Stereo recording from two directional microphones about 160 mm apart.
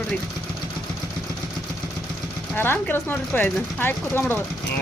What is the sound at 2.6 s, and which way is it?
Speech, 15° left (ahead or behind).